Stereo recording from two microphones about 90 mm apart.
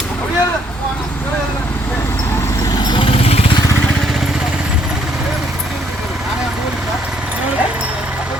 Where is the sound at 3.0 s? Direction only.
90° left.